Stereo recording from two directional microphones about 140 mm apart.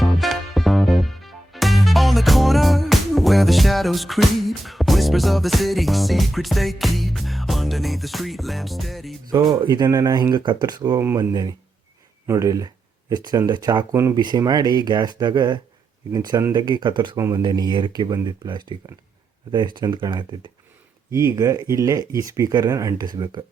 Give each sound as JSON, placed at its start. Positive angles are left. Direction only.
{"t": 0.0, "sound": "music", "side_deg": 0}
{"t": 9.6, "sound": "speech", "side_deg": -30}
{"t": 17.2, "sound": "speech", "side_deg": -20}
{"t": 21.1, "sound": "speech", "side_deg": -20}